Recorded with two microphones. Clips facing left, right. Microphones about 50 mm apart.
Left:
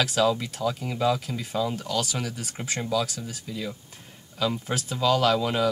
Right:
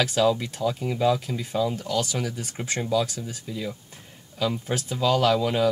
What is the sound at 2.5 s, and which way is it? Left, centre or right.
Speech, centre.